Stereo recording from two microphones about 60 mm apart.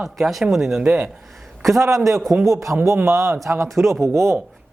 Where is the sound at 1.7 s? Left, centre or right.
Right.